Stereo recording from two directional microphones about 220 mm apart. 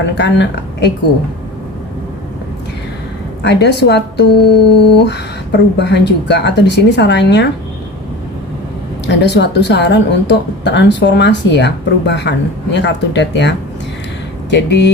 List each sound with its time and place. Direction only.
0.2 s a woman's voice: 50° left (ahead or behind)
3.4 s a woman's voice: 50° left (ahead or behind)
9.0 s a woman's voice: 50° left (ahead or behind)
14.5 s a woman's voice: 50° left (ahead or behind)